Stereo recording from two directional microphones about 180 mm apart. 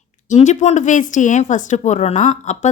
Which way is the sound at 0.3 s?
40° left (ahead or behind).